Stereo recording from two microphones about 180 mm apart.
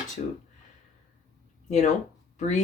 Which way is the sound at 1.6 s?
40° left (ahead or behind).